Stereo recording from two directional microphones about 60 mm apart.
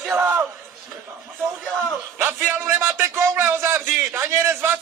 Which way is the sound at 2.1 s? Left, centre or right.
Right.